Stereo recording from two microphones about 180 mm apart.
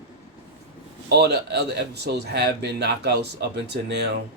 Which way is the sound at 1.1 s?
65° right (ahead or behind).